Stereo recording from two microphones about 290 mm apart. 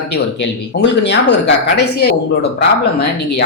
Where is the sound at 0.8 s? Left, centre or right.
Left.